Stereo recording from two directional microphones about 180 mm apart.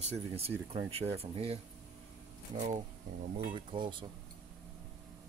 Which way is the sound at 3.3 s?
30° right (ahead or behind).